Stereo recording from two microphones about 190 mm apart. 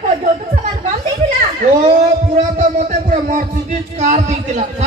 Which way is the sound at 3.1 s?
40° right (ahead or behind).